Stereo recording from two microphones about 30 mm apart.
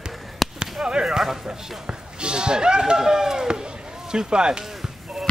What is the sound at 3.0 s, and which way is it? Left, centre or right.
Speech, centre.